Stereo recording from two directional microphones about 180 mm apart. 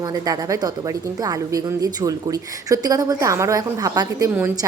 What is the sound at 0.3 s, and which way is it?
A woman's voice, 20° right (ahead or behind).